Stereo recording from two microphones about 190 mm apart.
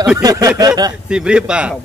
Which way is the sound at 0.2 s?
20° right (ahead or behind).